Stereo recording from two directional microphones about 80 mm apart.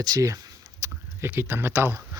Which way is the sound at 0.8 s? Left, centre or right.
Right.